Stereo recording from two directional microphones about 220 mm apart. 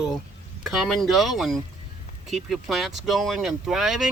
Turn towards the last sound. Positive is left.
turn(degrees=0)  # may be behind; listen again after turning